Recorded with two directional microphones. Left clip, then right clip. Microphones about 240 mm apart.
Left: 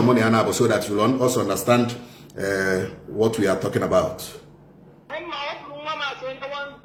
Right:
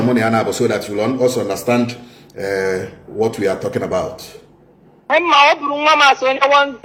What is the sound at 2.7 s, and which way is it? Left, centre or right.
Speech, centre.